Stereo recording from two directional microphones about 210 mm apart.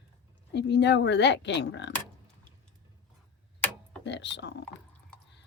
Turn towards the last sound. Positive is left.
turn(degrees=55)  # may be behind; listen again after turning